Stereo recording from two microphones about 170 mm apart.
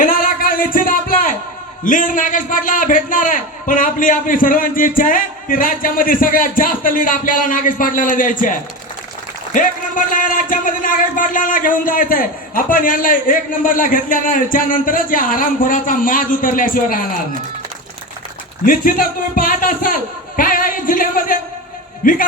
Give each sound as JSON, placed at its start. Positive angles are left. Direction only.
{"t": 0.0, "sound": "music", "side_deg": 55}
{"t": 0.7, "sound": "a sound", "side_deg": 55}
{"t": 1.8, "sound": "a man's voice", "side_deg": 50}
{"t": 18.6, "sound": "a man's voice", "side_deg": 55}